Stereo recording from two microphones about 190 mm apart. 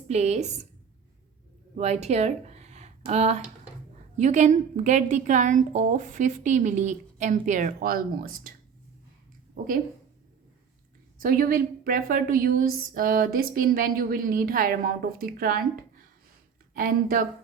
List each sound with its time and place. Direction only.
0.1 s a woman's voice: 35° right (ahead or behind)
1.7 s a woman's voice: 35° right (ahead or behind)
9.6 s a woman's voice: 45° right (ahead or behind)
11.2 s a woman's voice: 50° right (ahead or behind)